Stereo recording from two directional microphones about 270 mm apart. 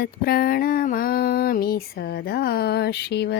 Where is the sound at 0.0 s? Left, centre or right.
Left.